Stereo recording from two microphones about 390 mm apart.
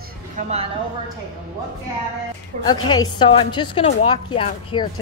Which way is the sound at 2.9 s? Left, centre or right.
Centre.